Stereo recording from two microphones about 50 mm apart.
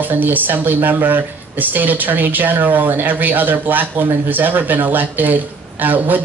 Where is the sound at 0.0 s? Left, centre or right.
Right.